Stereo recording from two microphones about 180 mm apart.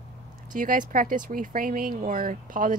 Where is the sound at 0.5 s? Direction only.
45° right (ahead or behind).